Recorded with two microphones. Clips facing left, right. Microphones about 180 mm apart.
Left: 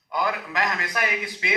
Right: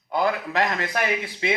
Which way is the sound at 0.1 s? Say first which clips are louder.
Right 3 dB; 30° right (ahead or behind).